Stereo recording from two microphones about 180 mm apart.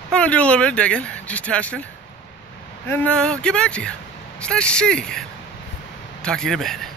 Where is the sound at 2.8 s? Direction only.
10° left (ahead or behind).